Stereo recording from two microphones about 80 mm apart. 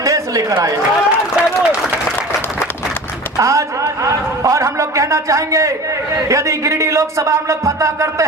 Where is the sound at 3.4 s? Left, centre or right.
Right.